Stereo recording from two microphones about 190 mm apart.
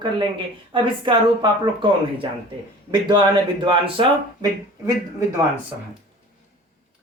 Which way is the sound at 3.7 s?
25° right (ahead or behind).